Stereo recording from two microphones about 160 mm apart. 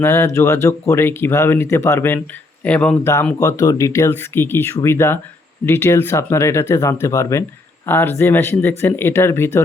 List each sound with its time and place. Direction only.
0.0 s speech: 15° left (ahead or behind)